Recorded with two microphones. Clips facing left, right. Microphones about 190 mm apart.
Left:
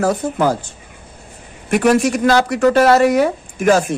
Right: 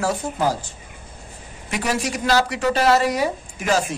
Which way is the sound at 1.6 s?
55° left (ahead or behind).